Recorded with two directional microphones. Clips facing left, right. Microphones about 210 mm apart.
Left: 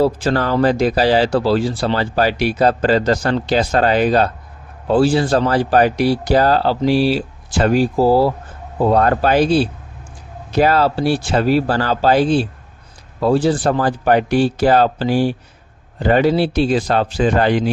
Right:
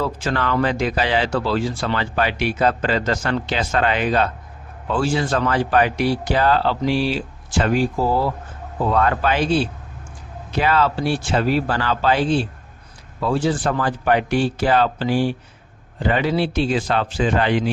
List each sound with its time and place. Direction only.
0.0 s speech: 35° left (ahead or behind)